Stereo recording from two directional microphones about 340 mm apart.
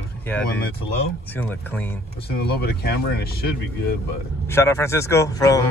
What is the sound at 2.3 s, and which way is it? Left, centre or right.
Speech, left.